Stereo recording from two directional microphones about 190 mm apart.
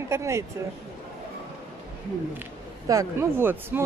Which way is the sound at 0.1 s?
15° right (ahead or behind).